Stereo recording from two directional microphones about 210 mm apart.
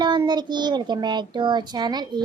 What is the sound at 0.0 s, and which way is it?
A child's voice, 20° right (ahead or behind).